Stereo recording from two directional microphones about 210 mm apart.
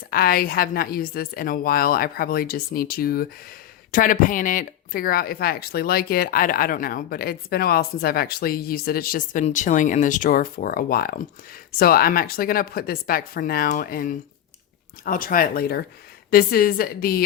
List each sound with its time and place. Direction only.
0.1 s speech: 45° left (ahead or behind)